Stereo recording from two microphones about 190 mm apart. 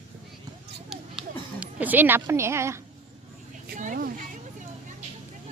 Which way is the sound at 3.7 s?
45° right (ahead or behind).